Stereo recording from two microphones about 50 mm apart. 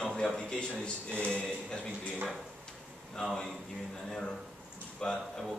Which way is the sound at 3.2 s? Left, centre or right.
Centre.